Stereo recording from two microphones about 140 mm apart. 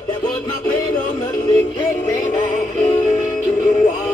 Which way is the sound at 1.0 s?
30° left (ahead or behind).